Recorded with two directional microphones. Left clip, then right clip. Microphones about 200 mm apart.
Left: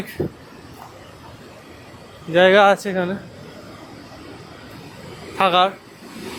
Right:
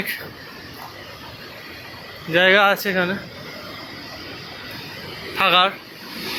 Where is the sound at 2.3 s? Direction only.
15° left (ahead or behind).